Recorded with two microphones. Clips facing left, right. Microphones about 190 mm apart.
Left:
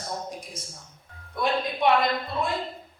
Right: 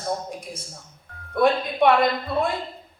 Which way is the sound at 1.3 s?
55° right (ahead or behind).